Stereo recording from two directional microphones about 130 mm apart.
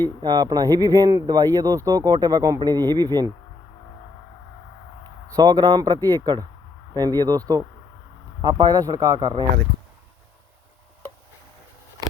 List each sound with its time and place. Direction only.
0.0 s speech: 35° right (ahead or behind)
5.4 s speech: 30° right (ahead or behind)
6.1 s speech: 25° right (ahead or behind)